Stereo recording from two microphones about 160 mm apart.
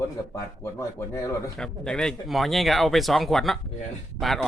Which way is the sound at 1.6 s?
5° left (ahead or behind).